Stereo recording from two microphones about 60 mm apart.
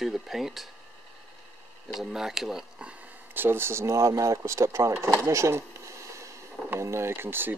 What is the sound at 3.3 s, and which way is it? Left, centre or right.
Speech, right.